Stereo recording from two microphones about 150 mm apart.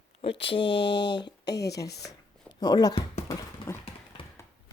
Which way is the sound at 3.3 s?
20° left (ahead or behind).